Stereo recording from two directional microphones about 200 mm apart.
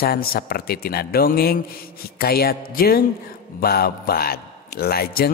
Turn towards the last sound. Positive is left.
turn(degrees=50)  # may be behind; listen again after turning